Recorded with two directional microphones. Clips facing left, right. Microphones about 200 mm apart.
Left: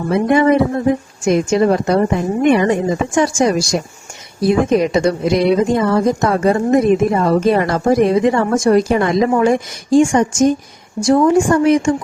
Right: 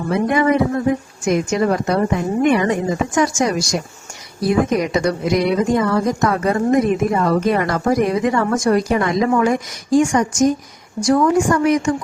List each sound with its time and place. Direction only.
0.3 s a woman's voice: 30° left (ahead or behind)